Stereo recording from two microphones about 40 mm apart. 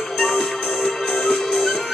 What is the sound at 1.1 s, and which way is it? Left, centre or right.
Music, left.